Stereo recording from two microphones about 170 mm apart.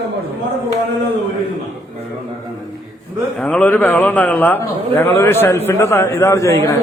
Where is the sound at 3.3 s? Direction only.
5° left (ahead or behind).